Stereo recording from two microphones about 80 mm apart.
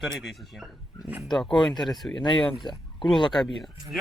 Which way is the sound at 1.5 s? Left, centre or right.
Left.